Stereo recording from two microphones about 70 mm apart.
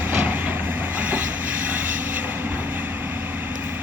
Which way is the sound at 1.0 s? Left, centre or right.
Right.